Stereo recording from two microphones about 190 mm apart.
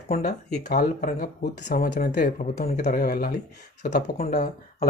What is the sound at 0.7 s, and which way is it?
Speech, 45° left (ahead or behind).